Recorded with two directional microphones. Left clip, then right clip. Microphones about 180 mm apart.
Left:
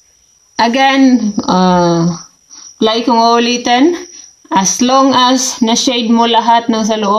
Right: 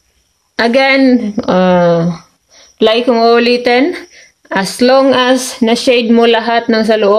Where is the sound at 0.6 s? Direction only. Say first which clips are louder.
Right 1 dB; 45° right (ahead or behind).